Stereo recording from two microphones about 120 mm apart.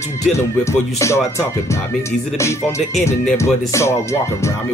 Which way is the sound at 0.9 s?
25° left (ahead or behind).